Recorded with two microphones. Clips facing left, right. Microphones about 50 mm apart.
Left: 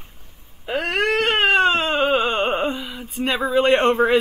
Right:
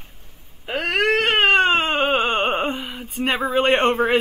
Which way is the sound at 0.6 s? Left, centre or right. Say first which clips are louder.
Right 1 dB; centre.